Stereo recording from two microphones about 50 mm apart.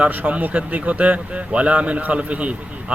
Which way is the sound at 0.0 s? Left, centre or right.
Right.